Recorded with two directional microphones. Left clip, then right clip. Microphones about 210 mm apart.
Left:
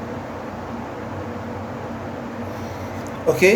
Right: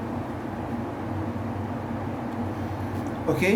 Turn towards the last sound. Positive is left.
turn(degrees=40)  # may be behind; listen again after turning